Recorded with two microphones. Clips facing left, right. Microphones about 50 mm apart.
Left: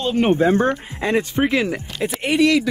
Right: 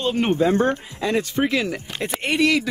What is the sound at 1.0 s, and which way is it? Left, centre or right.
Speech, left.